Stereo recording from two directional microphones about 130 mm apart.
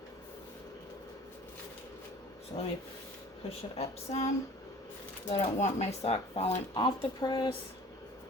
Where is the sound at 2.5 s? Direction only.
50° left (ahead or behind).